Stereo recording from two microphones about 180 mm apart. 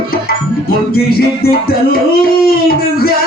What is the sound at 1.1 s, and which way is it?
Music, 60° left (ahead or behind).